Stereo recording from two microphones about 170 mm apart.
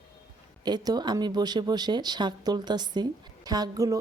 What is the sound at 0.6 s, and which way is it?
A woman's voice, 25° right (ahead or behind).